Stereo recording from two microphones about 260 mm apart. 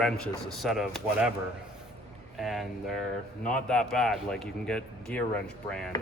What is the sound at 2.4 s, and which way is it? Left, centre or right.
Speech, centre.